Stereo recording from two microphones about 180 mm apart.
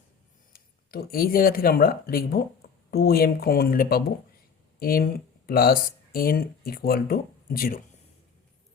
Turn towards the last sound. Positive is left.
turn(degrees=55)  # may be behind; listen again after turning